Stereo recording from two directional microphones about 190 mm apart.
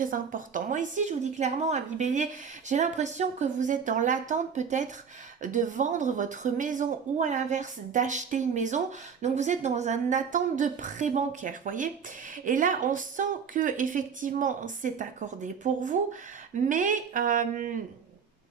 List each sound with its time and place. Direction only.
0.0 s speech: 45° right (ahead or behind)